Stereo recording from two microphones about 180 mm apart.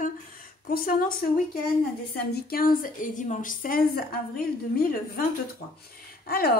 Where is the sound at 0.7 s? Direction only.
55° left (ahead or behind).